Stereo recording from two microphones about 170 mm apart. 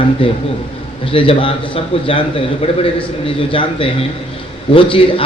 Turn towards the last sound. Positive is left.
turn(degrees=30)  # may be behind; listen again after turning